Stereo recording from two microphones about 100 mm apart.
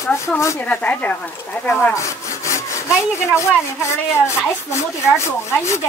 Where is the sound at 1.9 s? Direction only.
30° left (ahead or behind).